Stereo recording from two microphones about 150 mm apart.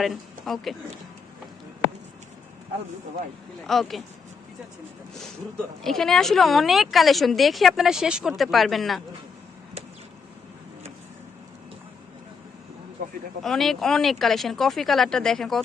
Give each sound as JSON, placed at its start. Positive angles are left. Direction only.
{"t": 0.0, "sound": "speech", "side_deg": 0}
{"t": 3.7, "sound": "a woman's voice", "side_deg": 0}
{"t": 5.8, "sound": "a woman's voice", "side_deg": 0}
{"t": 13.0, "sound": "a sound", "side_deg": -60}
{"t": 13.4, "sound": "a woman's voice", "side_deg": 0}